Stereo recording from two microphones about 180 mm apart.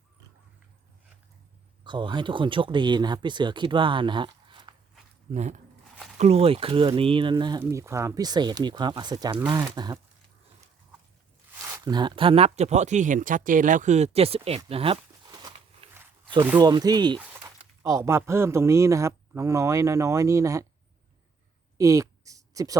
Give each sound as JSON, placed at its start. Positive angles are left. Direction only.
{"t": 1.8, "sound": "speech", "side_deg": -25}
{"t": 5.3, "sound": "speech", "side_deg": -40}
{"t": 11.6, "sound": "speech", "side_deg": -20}
{"t": 16.6, "sound": "a man's voice", "side_deg": -25}
{"t": 21.8, "sound": "a sound", "side_deg": -15}